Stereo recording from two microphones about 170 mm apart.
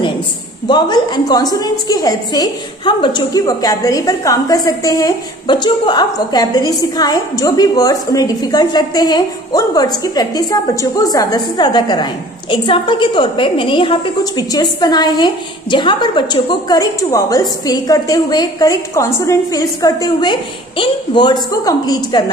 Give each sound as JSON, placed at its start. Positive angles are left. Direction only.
{"t": 0.7, "sound": "a woman's voice", "side_deg": 25}